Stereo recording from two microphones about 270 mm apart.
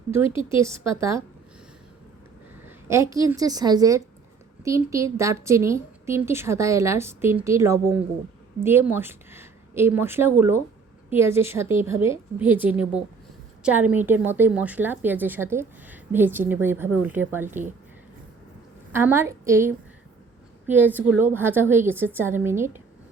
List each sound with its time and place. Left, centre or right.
0.4 s a woman's voice: centre
2.6 s a woman's voice: centre
18.9 s a woman's voice: centre